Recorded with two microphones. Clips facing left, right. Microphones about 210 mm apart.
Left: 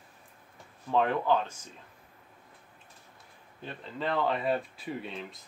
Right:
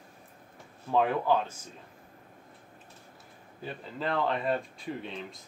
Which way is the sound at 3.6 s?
Centre (ahead or behind).